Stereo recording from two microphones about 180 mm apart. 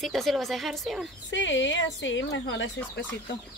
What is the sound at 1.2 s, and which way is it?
Speech, 90° left.